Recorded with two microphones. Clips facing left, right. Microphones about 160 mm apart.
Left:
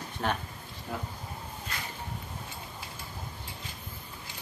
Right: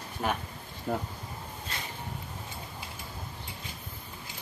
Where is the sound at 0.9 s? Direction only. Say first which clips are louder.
Right 6 dB; 60° right (ahead or behind).